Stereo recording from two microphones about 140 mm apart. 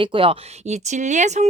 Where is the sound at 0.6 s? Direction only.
55° right (ahead or behind).